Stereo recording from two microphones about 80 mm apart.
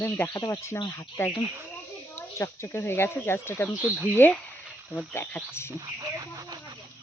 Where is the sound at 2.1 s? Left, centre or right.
Left.